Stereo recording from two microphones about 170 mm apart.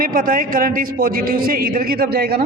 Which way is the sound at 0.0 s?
55° right (ahead or behind).